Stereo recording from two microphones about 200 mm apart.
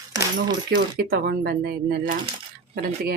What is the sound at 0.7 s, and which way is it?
Speech, 50° right (ahead or behind).